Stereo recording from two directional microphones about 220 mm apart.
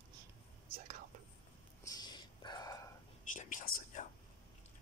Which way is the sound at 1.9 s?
20° left (ahead or behind).